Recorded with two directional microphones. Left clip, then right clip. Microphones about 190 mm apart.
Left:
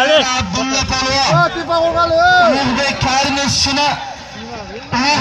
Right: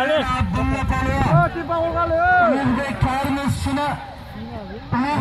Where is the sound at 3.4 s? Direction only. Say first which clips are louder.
Left 11 dB; 25° left (ahead or behind).